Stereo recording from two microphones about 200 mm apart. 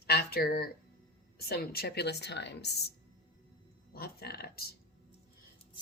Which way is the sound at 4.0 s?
50° left (ahead or behind).